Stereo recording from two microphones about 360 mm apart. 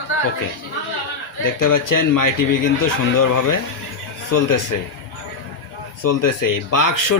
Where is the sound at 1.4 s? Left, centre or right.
Left.